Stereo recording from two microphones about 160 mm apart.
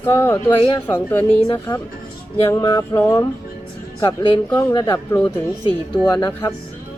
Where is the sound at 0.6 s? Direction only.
30° left (ahead or behind).